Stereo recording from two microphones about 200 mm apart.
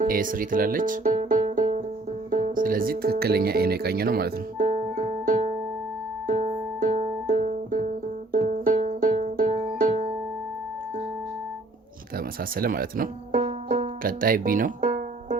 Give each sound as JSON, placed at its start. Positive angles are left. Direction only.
{"t": 0.0, "sound": "music", "side_deg": -45}
{"t": 2.3, "sound": "speech", "side_deg": -40}
{"t": 6.2, "sound": "music", "side_deg": -40}
{"t": 12.1, "sound": "speech", "side_deg": -45}
{"t": 13.4, "sound": "music", "side_deg": -30}
{"t": 14.0, "sound": "music", "side_deg": -45}